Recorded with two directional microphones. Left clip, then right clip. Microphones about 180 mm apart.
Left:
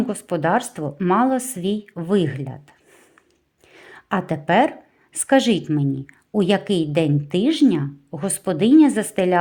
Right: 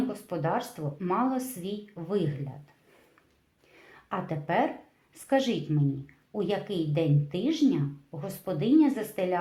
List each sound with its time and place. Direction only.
0.1 s a woman's voice: 45° left (ahead or behind)
3.8 s a sound: 40° left (ahead or behind)
5.1 s speech: 45° left (ahead or behind)